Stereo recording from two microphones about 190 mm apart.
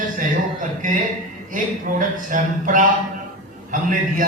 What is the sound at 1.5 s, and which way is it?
Speech, 45° right (ahead or behind).